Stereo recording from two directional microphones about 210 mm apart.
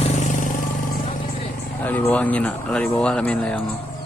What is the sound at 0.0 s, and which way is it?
Vehicle, 35° left (ahead or behind).